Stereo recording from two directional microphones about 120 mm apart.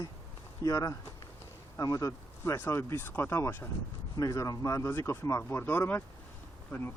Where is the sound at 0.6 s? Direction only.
30° left (ahead or behind).